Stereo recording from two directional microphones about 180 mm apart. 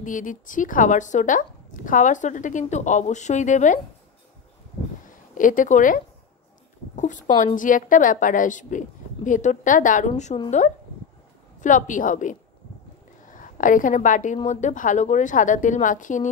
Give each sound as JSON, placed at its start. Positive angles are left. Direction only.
{"t": 0.0, "sound": "speech", "side_deg": 45}
{"t": 5.3, "sound": "speech", "side_deg": 45}
{"t": 11.6, "sound": "speech", "side_deg": 45}